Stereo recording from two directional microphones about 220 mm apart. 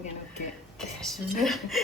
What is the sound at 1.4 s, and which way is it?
Female singing, centre (ahead or behind).